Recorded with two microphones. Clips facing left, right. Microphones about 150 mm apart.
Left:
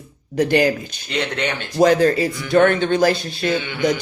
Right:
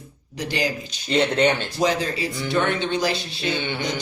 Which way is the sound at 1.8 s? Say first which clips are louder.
Left 10 dB; 50° left (ahead or behind).